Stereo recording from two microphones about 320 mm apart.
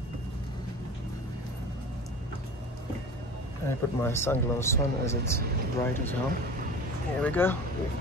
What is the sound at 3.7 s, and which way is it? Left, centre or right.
Speech, centre.